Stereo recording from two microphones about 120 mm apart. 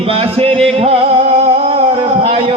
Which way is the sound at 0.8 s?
50° right (ahead or behind).